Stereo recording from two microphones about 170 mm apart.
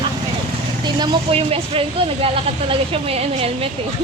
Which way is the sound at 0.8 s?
25° right (ahead or behind).